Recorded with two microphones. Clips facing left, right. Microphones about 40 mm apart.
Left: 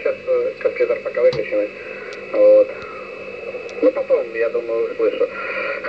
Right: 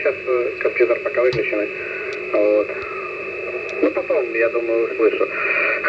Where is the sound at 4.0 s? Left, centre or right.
Right.